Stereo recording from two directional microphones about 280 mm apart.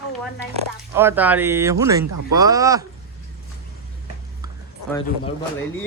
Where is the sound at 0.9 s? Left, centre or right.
Centre.